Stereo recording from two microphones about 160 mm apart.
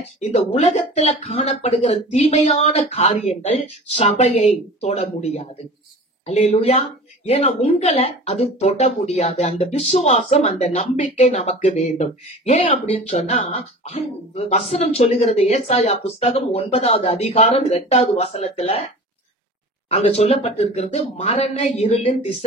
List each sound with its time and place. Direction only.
0.2 s speech: 40° left (ahead or behind)
19.9 s speech: 40° left (ahead or behind)